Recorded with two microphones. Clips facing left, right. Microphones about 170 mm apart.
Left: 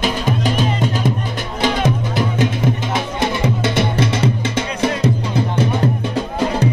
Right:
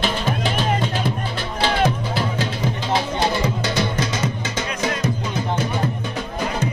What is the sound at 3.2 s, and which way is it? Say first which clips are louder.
Music: left 3 dB; 25° left (ahead or behind).